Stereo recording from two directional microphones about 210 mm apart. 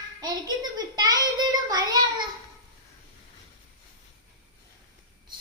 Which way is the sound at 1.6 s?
20° right (ahead or behind).